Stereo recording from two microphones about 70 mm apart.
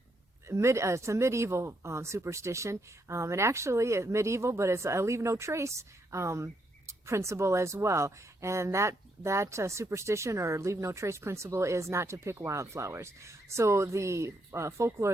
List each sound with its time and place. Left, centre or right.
0.4 s speech: right